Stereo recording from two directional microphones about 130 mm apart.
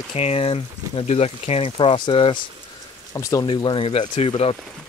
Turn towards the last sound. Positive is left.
turn(degrees=50)  # may be behind; listen again after turning